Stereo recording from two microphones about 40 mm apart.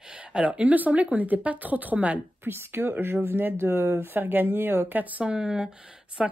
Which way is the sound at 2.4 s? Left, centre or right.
Right.